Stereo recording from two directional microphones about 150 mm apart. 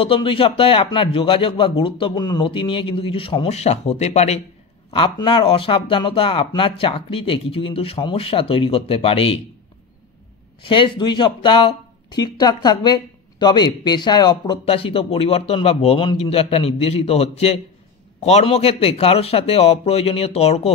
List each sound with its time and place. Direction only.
0.0 s speech: 35° left (ahead or behind)
4.9 s speech: 35° left (ahead or behind)
10.7 s speech: 35° left (ahead or behind)